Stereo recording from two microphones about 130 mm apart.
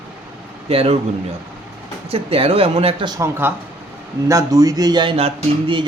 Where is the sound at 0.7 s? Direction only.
50° right (ahead or behind).